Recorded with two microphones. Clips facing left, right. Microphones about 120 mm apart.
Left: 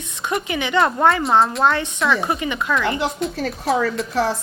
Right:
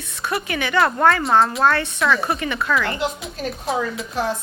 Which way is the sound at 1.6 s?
15° left (ahead or behind).